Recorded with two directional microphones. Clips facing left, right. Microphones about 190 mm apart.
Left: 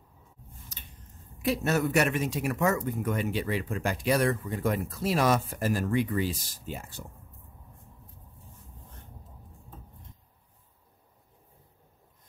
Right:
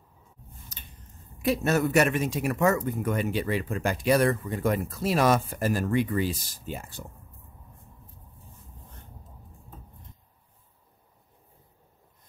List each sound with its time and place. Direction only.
1.4 s speech: 45° right (ahead or behind)